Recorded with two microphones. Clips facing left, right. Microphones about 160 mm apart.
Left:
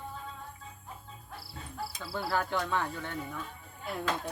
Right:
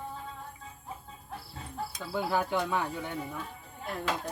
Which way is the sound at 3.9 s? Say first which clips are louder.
Even; 5° left (ahead or behind).